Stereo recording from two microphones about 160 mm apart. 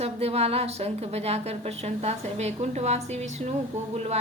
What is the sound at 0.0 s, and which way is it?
A woman's voice, 40° right (ahead or behind).